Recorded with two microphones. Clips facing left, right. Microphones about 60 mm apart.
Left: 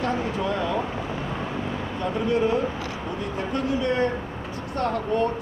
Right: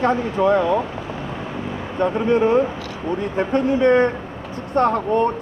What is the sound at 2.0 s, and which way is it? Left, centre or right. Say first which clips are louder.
Speech: right 6 dB; right.